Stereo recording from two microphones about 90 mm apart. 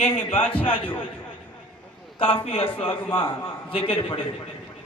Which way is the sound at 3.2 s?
75° left (ahead or behind).